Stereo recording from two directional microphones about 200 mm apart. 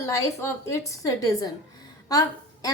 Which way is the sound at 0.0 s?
15° left (ahead or behind).